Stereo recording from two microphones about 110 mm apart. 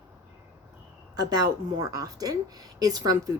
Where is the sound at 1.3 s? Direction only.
35° right (ahead or behind).